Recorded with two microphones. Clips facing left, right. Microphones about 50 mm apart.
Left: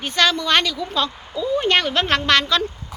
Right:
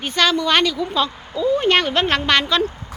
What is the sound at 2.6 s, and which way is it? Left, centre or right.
Speech, right.